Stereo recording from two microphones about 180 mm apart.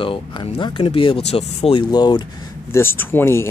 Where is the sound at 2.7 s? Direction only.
15° left (ahead or behind).